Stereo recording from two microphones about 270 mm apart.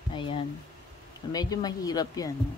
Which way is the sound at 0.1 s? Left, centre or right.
Centre.